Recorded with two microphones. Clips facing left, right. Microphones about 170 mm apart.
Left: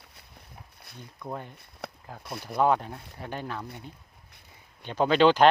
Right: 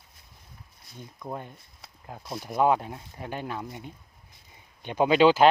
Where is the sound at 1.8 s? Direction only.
70° left (ahead or behind).